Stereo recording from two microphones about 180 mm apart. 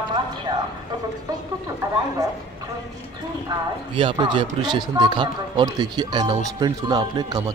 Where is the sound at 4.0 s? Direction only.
30° right (ahead or behind).